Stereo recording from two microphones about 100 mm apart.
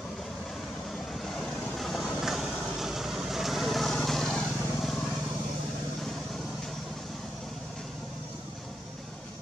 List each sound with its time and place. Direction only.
1.2 s vehicle: centre (ahead or behind)